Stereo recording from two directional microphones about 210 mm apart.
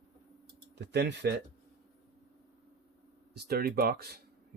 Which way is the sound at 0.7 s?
55° right (ahead or behind).